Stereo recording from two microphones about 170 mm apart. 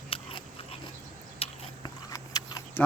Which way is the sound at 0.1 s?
35° left (ahead or behind).